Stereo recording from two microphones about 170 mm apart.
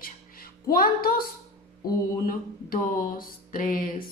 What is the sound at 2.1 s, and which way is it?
Mantra, 55° left (ahead or behind).